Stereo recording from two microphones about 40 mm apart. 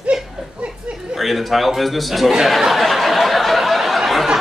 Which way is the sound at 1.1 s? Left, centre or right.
Centre.